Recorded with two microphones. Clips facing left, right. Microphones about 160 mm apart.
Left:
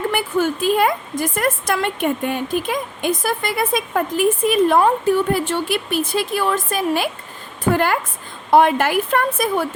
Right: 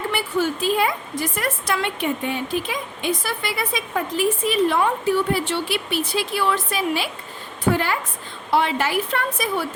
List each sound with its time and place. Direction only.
0.1 s a woman's voice: 50° left (ahead or behind)